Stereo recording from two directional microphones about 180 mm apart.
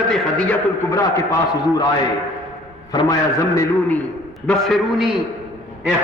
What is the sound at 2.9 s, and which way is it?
A man's voice, 20° left (ahead or behind).